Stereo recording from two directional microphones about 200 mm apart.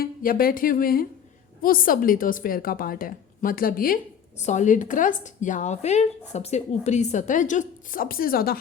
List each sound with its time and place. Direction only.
0.0 s a woman's voice: 45° left (ahead or behind)